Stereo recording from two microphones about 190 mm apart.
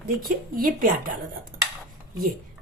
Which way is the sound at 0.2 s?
50° right (ahead or behind).